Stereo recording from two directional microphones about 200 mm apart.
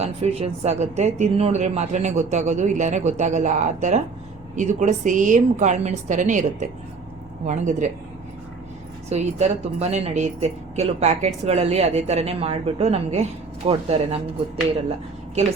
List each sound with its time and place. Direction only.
0.0 s a woman's voice: 30° right (ahead or behind)
9.0 s a woman's voice: 35° right (ahead or behind)